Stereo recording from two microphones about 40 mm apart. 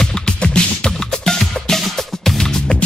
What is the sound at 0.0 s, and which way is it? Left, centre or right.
Music, centre.